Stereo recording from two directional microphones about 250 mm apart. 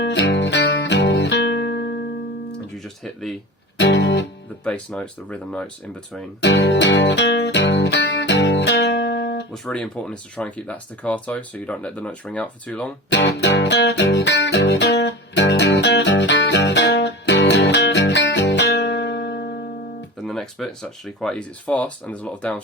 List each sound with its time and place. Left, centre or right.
0.0 s music: left
2.7 s speech: centre
3.8 s music: left
4.6 s speech: centre
6.4 s music: left
9.5 s speech: centre
13.1 s music: left
20.2 s speech: centre